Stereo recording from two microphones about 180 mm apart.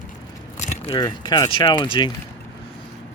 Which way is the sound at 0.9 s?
25° left (ahead or behind).